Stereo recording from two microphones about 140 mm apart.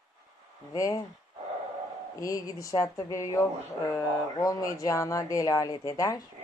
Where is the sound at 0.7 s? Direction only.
25° left (ahead or behind).